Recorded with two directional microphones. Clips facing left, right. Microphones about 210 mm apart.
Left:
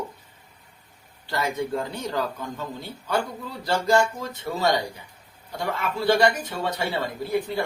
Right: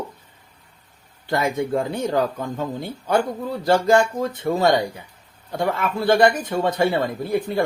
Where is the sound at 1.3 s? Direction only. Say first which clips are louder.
Right 5 dB; 50° right (ahead or behind).